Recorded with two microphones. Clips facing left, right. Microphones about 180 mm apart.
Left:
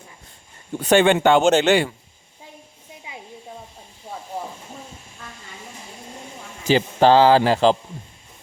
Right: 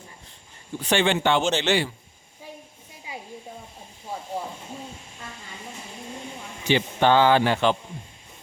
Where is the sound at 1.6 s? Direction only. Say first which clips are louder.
Left 6 dB; 65° left (ahead or behind).